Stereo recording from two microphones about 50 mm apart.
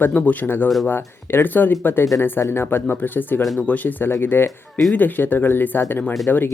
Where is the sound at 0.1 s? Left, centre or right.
Left.